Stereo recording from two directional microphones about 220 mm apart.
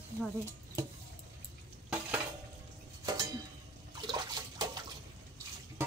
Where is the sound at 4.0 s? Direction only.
20° right (ahead or behind).